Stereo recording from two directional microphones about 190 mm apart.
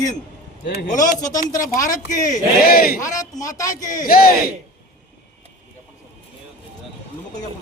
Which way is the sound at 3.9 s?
50° left (ahead or behind).